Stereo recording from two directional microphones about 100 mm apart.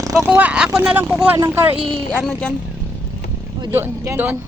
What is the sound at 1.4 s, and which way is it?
Speech, 25° right (ahead or behind).